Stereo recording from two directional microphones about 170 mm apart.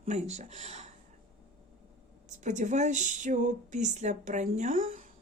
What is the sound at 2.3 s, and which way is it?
Speech, 45° right (ahead or behind).